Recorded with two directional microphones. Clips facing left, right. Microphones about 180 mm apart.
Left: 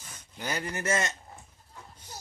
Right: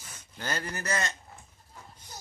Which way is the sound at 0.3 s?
15° left (ahead or behind).